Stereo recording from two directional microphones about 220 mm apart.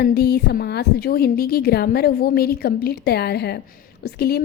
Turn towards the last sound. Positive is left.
turn(degrees=45)  # may be behind; listen again after turning